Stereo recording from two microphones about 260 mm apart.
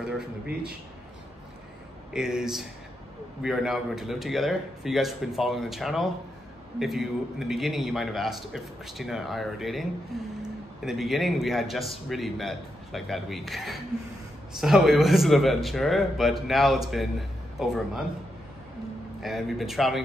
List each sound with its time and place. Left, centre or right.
2.1 s a man's voice: centre
19.2 s a man's voice: centre